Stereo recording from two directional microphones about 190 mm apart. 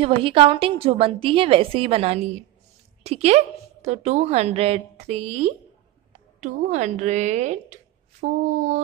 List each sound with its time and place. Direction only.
0.0 s a woman's voice: 30° right (ahead or behind)